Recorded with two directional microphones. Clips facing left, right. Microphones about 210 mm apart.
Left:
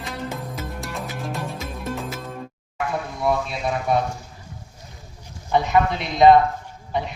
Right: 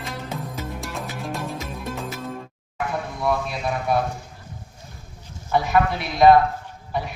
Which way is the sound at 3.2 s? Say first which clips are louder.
Left 1 dB; 25° left (ahead or behind).